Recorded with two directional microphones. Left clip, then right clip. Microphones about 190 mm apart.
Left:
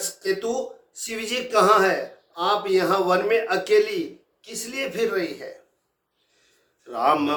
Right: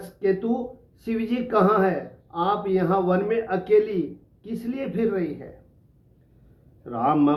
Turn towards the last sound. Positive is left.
turn(degrees=20)  # may be behind; listen again after turning